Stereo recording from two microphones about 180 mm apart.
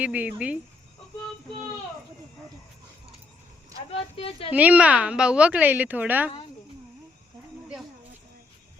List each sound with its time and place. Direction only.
0.0 s a woman's voice: 5° right (ahead or behind)
3.9 s speech: 30° left (ahead or behind)
4.5 s a woman's voice: 5° right (ahead or behind)